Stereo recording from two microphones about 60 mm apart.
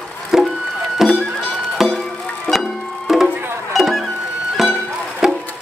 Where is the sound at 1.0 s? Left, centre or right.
Centre.